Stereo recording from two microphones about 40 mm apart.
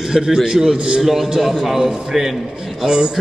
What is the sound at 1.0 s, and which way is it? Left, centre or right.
A man's voice, centre.